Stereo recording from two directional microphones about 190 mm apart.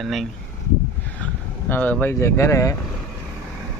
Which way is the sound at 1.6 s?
10° left (ahead or behind).